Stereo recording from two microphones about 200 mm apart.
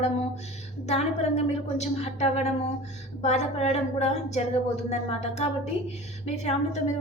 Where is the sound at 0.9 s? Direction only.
35° left (ahead or behind).